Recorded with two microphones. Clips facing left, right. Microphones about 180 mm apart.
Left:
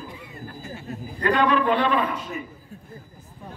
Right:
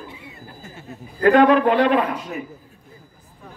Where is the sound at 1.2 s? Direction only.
65° right (ahead or behind).